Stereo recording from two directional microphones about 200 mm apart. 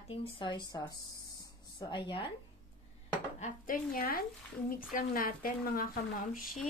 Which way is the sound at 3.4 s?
45° left (ahead or behind).